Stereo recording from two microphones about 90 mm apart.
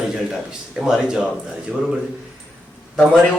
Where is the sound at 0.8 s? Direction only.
5° right (ahead or behind).